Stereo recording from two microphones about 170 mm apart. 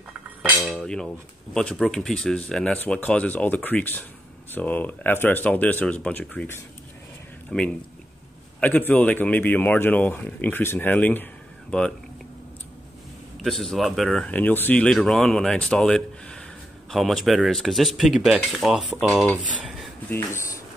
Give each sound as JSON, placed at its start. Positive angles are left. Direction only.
{"t": 0.7, "sound": "speech", "side_deg": 5}
{"t": 13.4, "sound": "speech", "side_deg": 0}
{"t": 20.1, "sound": "speech", "side_deg": 15}